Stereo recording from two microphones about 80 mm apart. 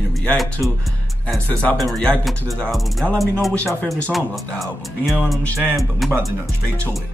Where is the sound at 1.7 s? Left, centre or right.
Centre.